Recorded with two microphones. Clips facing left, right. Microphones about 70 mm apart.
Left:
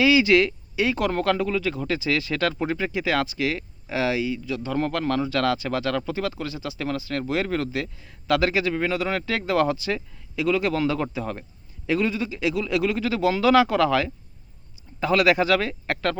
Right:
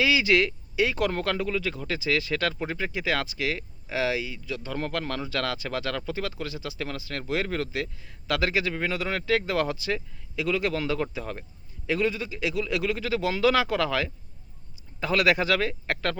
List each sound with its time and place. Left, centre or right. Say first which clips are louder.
0.0 s a man's voice: left 5 dB; left